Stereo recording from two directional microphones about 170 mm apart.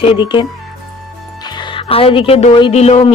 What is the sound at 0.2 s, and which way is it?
Speech, 30° left (ahead or behind).